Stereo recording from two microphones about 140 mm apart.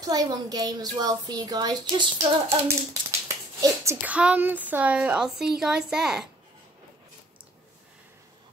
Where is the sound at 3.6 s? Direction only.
25° right (ahead or behind).